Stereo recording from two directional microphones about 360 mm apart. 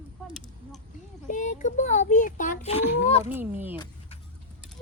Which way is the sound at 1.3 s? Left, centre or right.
Left.